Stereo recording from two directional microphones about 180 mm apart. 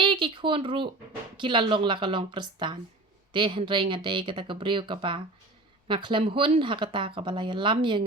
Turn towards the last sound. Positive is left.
turn(degrees=-25)  # may be behind; listen again after turning